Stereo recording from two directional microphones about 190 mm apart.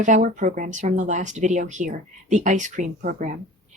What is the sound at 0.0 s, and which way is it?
Speech, 40° right (ahead or behind).